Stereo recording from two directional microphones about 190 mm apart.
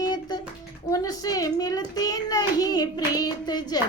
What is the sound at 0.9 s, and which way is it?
A child's voice, 20° left (ahead or behind).